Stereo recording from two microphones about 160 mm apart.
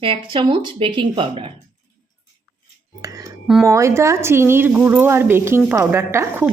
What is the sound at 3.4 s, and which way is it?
Speech, 5° right (ahead or behind).